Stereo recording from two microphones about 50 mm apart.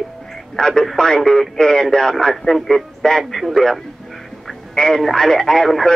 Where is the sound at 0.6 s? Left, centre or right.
Centre.